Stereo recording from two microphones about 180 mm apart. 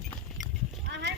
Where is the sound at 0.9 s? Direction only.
75° right (ahead or behind).